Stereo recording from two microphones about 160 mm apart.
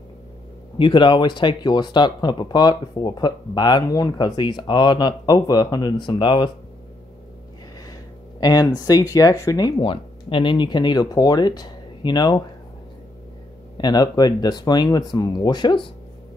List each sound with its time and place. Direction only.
0.7 s speech: 30° left (ahead or behind)
8.4 s speech: 25° left (ahead or behind)
13.7 s speech: 25° left (ahead or behind)